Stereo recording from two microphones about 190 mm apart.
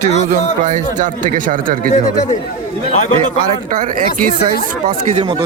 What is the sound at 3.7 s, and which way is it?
Speech, 45° right (ahead or behind).